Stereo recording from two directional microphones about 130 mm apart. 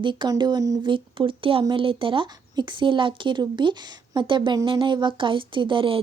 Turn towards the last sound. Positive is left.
turn(degrees=-40)  # may be behind; listen again after turning